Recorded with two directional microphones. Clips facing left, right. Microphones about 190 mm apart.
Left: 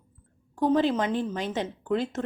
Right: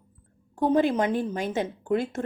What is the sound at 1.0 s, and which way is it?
Speech, 10° right (ahead or behind).